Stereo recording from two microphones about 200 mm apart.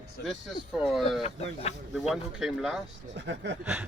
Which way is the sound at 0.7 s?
Centre (ahead or behind).